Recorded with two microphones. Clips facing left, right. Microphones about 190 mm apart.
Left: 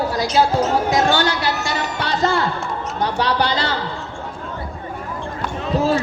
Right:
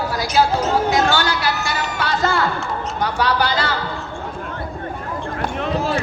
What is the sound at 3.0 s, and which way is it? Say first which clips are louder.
Speech: even; 25° left (ahead or behind).